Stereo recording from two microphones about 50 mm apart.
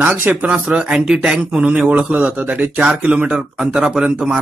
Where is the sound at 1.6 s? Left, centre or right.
Right.